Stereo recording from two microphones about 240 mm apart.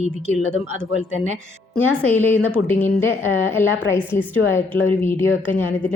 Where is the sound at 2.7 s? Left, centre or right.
Centre.